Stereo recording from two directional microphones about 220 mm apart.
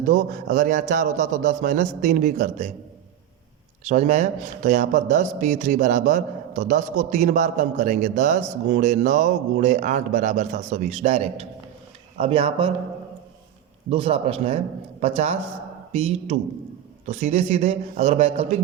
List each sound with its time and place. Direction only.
0.0 s a man's voice: 35° right (ahead or behind)
3.8 s a man's voice: 30° right (ahead or behind)
13.9 s a man's voice: 25° right (ahead or behind)